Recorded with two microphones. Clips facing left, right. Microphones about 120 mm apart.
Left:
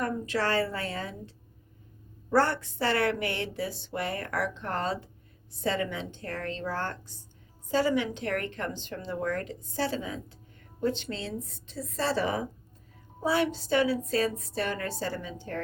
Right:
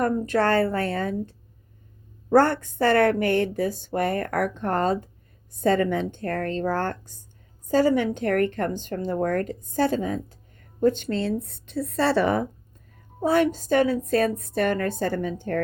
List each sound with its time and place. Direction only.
0.0 s speech: 50° right (ahead or behind)
2.3 s a woman's voice: 50° right (ahead or behind)
13.2 s speech: 50° right (ahead or behind)